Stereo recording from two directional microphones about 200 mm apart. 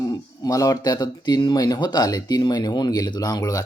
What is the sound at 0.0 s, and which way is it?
Speech, 20° left (ahead or behind).